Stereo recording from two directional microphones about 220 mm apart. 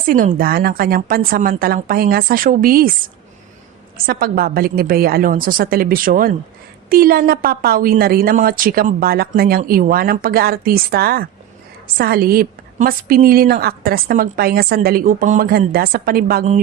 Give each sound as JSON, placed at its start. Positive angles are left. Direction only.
{"t": 0.0, "sound": "a woman's voice", "side_deg": -40}
{"t": 3.9, "sound": "a woman's voice", "side_deg": -45}